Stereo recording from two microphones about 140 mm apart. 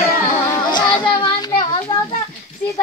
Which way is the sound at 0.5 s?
35° left (ahead or behind).